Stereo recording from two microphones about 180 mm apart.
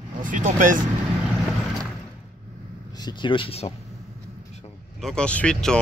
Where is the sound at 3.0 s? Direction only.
25° left (ahead or behind).